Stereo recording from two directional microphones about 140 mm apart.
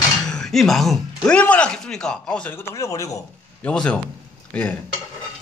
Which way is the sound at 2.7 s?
25° left (ahead or behind).